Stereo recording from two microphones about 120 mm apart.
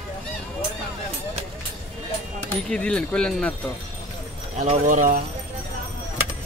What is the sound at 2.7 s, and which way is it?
Speech, 10° left (ahead or behind).